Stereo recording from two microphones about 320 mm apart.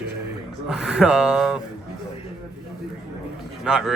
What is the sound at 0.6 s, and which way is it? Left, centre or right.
Speech, centre.